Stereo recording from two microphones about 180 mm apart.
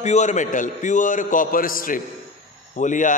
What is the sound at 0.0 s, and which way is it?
A man's voice, 40° left (ahead or behind).